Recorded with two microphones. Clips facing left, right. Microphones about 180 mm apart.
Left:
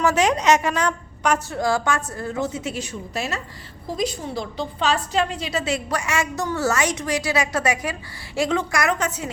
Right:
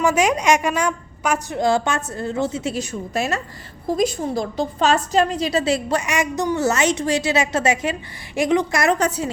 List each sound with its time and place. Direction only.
0.0 s a woman's voice: 10° right (ahead or behind)
1.5 s a woman's voice: 25° right (ahead or behind)
2.8 s a woman's voice: 50° right (ahead or behind); by 6.0 s 35° right (ahead or behind)
6.0 s a woman's voice: 15° right (ahead or behind); by 9.3 s 35° right (ahead or behind)